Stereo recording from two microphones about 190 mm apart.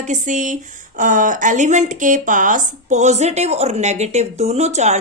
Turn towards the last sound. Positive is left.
turn(degrees=-35)  # may be behind; listen again after turning